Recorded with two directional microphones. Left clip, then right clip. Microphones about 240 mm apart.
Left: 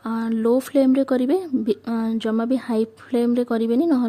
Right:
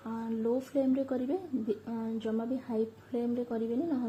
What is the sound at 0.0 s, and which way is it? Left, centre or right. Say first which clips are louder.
A woman's voice: left 12 dB; left.